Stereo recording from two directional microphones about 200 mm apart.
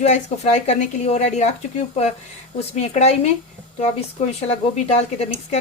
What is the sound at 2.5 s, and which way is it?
Speech, 30° left (ahead or behind).